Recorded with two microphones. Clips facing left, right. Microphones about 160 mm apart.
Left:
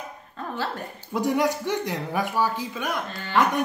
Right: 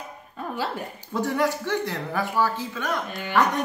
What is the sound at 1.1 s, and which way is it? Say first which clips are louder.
A man's voice: left 1 dB; 15° left (ahead or behind).